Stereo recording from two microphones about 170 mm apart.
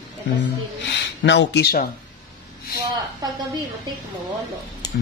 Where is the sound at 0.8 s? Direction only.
90° left; by 1.9 s 65° left (ahead or behind).